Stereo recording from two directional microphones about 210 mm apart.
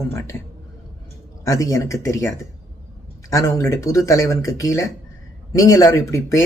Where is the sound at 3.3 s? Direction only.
15° left (ahead or behind).